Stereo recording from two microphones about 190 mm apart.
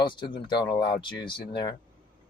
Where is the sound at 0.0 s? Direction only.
25° left (ahead or behind).